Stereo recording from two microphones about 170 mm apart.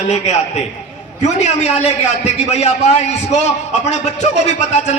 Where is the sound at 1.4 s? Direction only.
40° left (ahead or behind).